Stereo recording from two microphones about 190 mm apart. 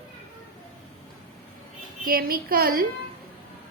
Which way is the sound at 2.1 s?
50° right (ahead or behind).